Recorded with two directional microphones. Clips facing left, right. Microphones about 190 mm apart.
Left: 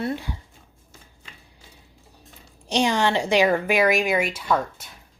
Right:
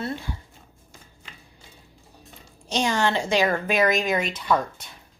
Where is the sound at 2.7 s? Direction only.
15° left (ahead or behind).